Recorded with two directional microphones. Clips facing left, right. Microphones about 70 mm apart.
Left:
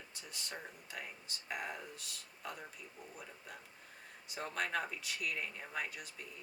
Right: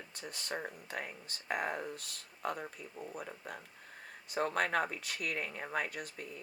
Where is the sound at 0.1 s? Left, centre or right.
Right.